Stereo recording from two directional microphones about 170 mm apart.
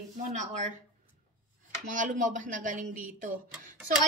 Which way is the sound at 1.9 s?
50° right (ahead or behind).